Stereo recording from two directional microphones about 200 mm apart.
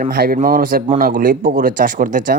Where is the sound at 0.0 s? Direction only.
50° right (ahead or behind).